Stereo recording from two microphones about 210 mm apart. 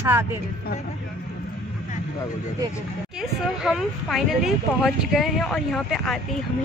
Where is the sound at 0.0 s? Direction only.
10° right (ahead or behind).